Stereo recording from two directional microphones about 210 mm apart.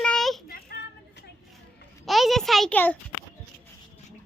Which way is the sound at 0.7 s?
45° left (ahead or behind).